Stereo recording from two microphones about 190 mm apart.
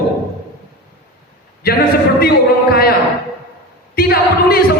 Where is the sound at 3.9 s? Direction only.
55° left (ahead or behind).